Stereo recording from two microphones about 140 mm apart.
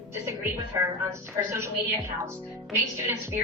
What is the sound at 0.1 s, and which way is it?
A woman's voice, 20° right (ahead or behind).